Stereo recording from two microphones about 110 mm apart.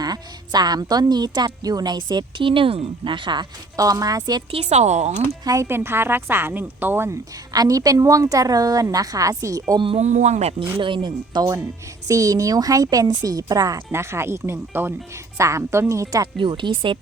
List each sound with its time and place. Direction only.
0.0 s a woman's voice: 40° right (ahead or behind)
3.8 s a woman's voice: 35° right (ahead or behind)
4.5 s a woman's voice: 70° right (ahead or behind); by 5.1 s 90° right
5.5 s a woman's voice: 25° right (ahead or behind)
7.5 s a woman's voice: 35° right (ahead or behind)
10.0 s a woman's voice: 90° right
10.8 s a woman's voice: 45° right (ahead or behind)
13.9 s a woman's voice: 25° right (ahead or behind)
16.2 s speech: 45° right (ahead or behind)